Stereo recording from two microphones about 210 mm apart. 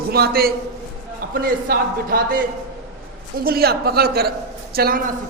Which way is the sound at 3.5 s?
45° right (ahead or behind).